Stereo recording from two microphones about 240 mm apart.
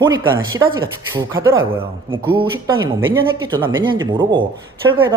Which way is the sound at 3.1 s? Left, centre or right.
Centre.